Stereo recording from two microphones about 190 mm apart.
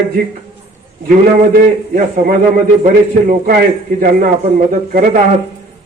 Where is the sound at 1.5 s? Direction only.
45° right (ahead or behind).